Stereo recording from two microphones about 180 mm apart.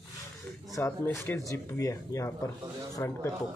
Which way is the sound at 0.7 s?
15° left (ahead or behind).